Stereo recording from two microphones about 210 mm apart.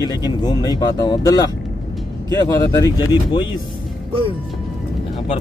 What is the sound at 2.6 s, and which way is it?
Speech, 20° left (ahead or behind).